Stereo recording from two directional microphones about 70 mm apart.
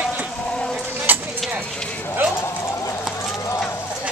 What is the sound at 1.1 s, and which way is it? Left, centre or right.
Vehicle, right.